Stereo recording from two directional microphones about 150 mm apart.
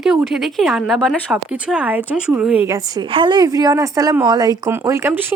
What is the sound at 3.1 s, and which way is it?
Speech, 30° right (ahead or behind).